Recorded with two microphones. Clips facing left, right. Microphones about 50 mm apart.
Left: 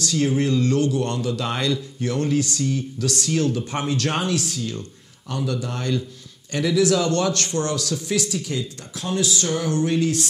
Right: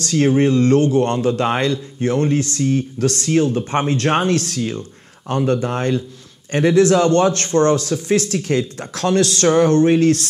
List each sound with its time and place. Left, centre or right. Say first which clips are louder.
0.0 s speech: right 6 dB; right
4.4 s speech: right 6 dB; right
5.3 s speech: right 8 dB; right
8.3 s speech: right 8 dB; right
8.7 s speech: right 9 dB; right